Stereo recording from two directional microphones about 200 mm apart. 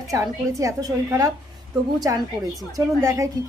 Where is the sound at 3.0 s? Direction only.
15° right (ahead or behind).